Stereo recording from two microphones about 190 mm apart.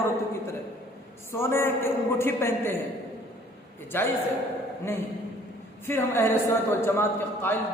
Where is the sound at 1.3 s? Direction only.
15° left (ahead or behind).